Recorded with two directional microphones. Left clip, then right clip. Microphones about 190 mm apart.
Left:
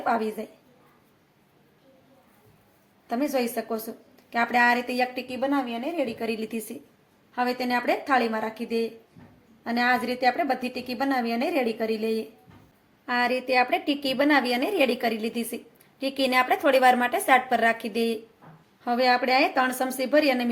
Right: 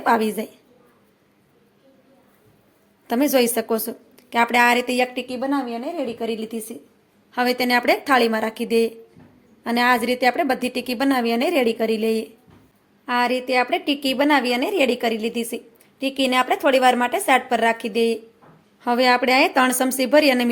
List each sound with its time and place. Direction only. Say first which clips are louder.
0.0 s a woman's voice: right 7 dB; 50° right (ahead or behind)
3.1 s a woman's voice: right 8 dB; 50° right (ahead or behind)
5.3 s a woman's voice: right 3 dB; 25° right (ahead or behind)
7.3 s a woman's voice: right 6 dB; 55° right (ahead or behind); by 12.2 s 40° right (ahead or behind)
13.1 s a woman's voice: right 4 dB; 20° right (ahead or behind)
18.8 s a woman's voice: right 5 dB; 30° right (ahead or behind)